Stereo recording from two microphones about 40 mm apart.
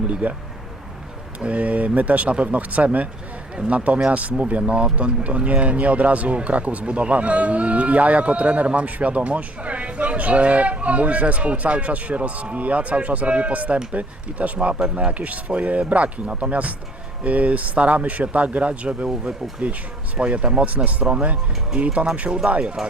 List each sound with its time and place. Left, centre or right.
0.1 s speech: right
1.4 s speech: right